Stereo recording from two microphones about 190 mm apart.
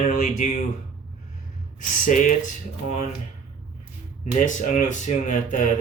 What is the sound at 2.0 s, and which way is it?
Speech, 40° left (ahead or behind).